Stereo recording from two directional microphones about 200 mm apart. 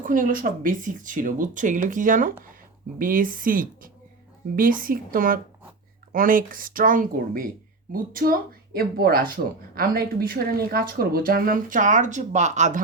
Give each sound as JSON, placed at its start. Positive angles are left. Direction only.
{"t": 0.0, "sound": "speech", "side_deg": -40}